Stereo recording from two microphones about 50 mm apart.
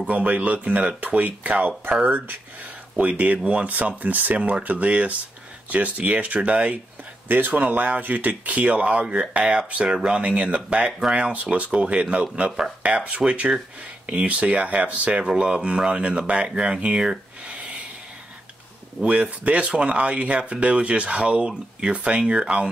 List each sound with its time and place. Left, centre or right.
0.0 s speech: right
3.0 s speech: right
7.2 s speech: right
10.9 s speech: centre
11.1 s speech: right
19.0 s speech: right